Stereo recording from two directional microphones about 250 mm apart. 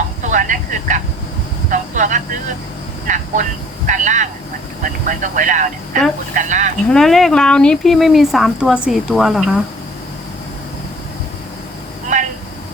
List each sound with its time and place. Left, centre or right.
0.3 s vehicle: right
3.1 s speech: right
6.8 s speech: centre